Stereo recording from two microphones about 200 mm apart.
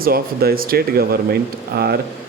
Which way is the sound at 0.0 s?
50° right (ahead or behind).